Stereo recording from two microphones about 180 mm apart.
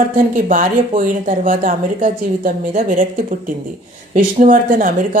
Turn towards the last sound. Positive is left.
turn(degrees=-50)  # may be behind; listen again after turning